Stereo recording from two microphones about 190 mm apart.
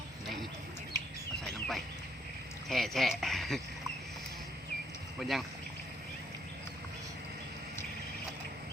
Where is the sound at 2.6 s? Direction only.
Centre (ahead or behind).